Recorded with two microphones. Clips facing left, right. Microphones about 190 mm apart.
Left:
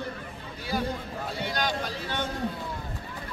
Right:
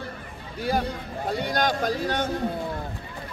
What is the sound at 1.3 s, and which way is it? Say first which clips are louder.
Speech: right 6 dB; 45° right (ahead or behind).